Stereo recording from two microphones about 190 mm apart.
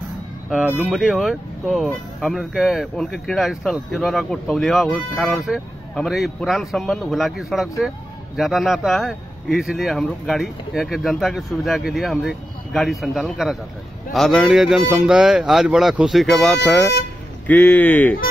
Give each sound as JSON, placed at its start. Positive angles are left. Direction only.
{"t": 0.5, "sound": "speech", "side_deg": -5}